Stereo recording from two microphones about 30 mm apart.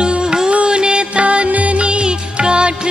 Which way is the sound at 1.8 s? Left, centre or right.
Right.